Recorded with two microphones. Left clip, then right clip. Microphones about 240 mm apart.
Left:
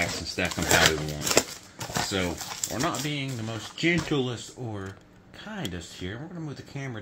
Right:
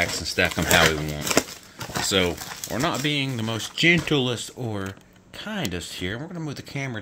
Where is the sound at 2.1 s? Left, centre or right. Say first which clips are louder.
Right 7 dB; right.